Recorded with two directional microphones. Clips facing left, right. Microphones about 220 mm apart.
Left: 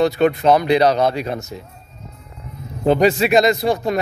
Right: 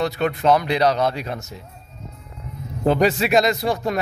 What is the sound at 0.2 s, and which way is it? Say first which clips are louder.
A man's voice: left 4 dB; centre (ahead or behind).